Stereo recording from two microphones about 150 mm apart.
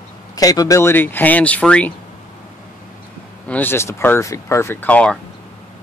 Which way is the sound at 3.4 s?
10° left (ahead or behind).